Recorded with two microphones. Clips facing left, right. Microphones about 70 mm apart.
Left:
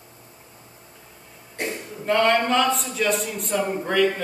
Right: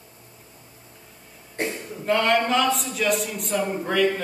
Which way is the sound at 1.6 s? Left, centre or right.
Right.